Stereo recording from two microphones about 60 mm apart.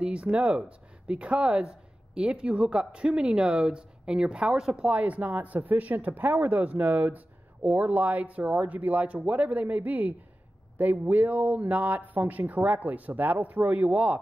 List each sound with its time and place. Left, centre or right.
0.0 s speech: centre
4.9 s speech: right